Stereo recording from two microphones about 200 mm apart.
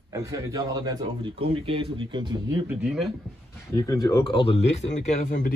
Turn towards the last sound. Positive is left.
turn(degrees=35)  # may be behind; listen again after turning